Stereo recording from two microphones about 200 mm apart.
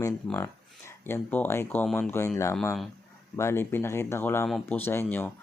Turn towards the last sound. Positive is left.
turn(degrees=10)  # may be behind; listen again after turning